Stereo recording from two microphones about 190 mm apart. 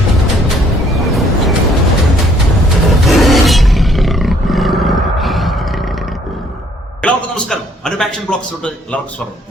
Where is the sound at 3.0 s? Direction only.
Centre (ahead or behind).